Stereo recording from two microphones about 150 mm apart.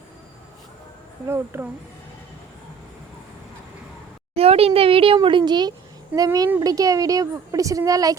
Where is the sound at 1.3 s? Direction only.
15° right (ahead or behind).